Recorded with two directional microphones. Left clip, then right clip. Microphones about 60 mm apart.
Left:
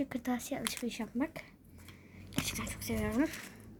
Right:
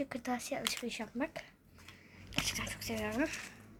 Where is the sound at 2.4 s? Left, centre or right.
Centre.